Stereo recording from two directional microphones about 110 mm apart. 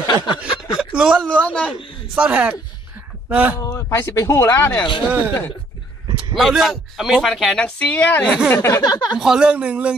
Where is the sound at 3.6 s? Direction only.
30° left (ahead or behind).